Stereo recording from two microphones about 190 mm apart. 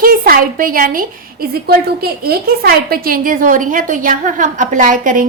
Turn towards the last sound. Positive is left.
turn(degrees=-45)  # may be behind; listen again after turning